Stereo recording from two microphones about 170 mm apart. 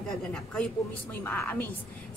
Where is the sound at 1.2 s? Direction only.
10° left (ahead or behind).